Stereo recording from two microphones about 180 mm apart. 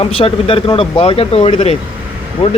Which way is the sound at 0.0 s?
30° left (ahead or behind).